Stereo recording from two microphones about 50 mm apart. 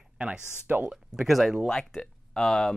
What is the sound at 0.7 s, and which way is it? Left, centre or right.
Speech, right.